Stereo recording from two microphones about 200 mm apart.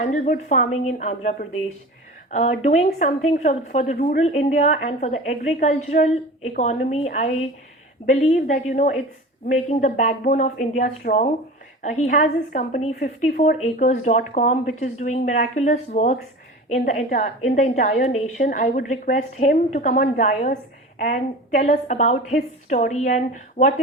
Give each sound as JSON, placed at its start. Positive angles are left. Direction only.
{"t": 0.0, "sound": "a woman's voice", "side_deg": 35}